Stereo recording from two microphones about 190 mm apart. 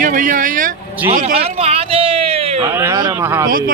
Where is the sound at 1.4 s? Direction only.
30° right (ahead or behind).